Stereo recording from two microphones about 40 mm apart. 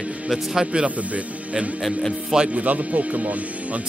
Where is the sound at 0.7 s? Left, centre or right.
Right.